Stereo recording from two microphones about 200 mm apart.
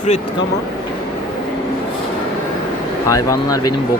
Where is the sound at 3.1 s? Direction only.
15° left (ahead or behind).